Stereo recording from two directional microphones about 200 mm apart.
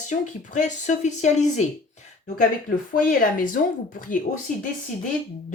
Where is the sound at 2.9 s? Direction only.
45° left (ahead or behind).